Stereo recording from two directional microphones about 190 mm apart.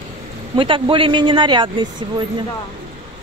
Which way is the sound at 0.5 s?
25° right (ahead or behind).